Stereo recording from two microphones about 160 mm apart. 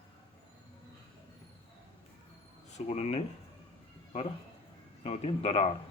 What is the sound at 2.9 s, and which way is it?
Speech, 40° left (ahead or behind).